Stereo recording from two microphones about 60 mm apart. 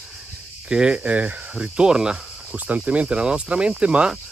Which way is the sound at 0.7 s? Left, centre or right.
Centre.